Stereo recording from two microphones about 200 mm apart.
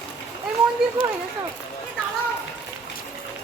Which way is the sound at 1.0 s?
25° left (ahead or behind).